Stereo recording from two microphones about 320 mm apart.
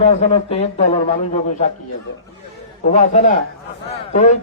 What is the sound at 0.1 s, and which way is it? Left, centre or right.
Speech, centre.